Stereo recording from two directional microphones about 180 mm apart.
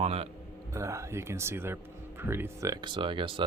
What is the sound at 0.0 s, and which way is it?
Speech, 35° right (ahead or behind).